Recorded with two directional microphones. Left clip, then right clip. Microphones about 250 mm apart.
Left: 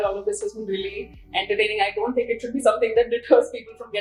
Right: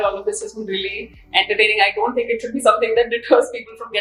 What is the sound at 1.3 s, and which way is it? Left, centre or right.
Speech, centre.